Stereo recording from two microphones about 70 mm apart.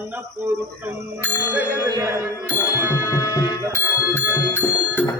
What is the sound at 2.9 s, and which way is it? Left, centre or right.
Music, left.